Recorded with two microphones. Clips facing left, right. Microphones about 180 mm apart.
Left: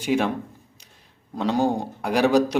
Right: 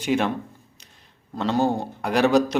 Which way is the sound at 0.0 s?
10° left (ahead or behind).